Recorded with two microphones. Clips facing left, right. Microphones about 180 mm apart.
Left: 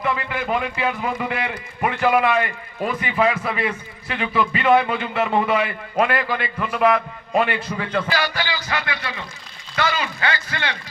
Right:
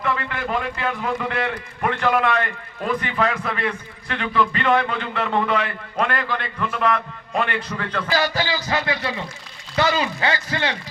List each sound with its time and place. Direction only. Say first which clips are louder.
0.0 s a man's voice: left 1 dB; 10° left (ahead or behind)
8.2 s music: right 3 dB; 40° right (ahead or behind)
8.7 s speech: right 4 dB; 25° right (ahead or behind)